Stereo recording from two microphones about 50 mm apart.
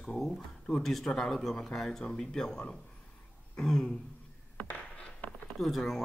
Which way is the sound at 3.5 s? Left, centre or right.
Centre.